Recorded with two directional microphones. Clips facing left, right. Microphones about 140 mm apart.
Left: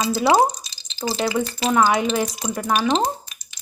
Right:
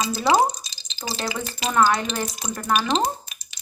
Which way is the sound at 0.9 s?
10° left (ahead or behind).